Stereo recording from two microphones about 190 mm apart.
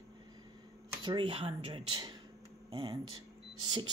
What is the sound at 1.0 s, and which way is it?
Speech, 25° right (ahead or behind).